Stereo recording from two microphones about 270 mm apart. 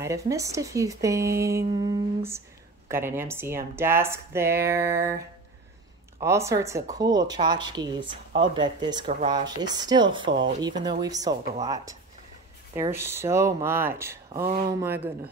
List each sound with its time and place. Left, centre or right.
0.0 s speech: centre